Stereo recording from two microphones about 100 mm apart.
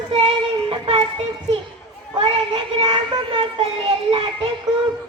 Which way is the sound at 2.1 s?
65° right (ahead or behind).